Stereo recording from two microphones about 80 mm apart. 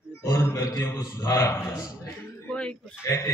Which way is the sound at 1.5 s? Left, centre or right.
Left.